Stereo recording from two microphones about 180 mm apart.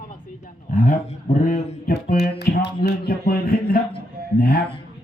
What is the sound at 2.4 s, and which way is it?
Speech, 70° left (ahead or behind).